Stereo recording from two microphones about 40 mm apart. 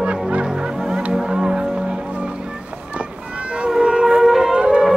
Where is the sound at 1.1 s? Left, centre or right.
Centre.